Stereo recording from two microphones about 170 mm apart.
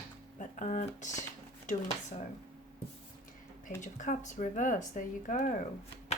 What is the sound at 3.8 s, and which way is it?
Speech, 45° left (ahead or behind).